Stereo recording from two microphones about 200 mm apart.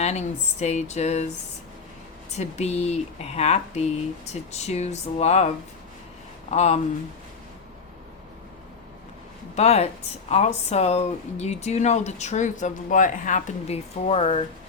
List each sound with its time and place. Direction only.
0.0 s speech: 35° left (ahead or behind)
2.3 s speech: 35° left (ahead or behind)
9.6 s speech: 35° left (ahead or behind)